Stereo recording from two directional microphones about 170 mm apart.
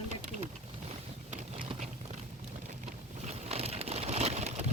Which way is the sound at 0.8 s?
40° right (ahead or behind).